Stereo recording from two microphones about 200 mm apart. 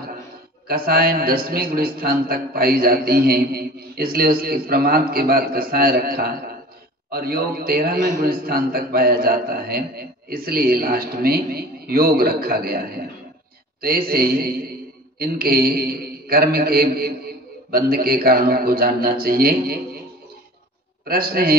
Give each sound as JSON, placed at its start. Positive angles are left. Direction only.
{"t": 0.8, "sound": "a man's voice", "side_deg": -50}
{"t": 21.1, "sound": "a man's voice", "side_deg": -50}